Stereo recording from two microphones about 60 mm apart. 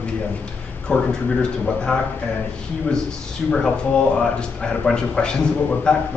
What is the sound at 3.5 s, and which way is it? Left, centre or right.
Speech, centre.